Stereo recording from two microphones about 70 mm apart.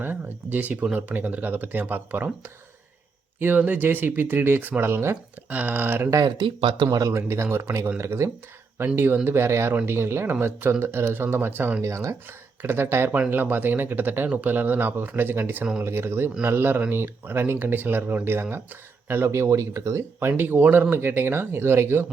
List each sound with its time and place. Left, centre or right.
0.0 s speech: right
5.5 s speech: right
7.1 s speech: right
8.8 s speech: right
11.8 s speech: right
12.6 s speech: right
20.1 s speech: right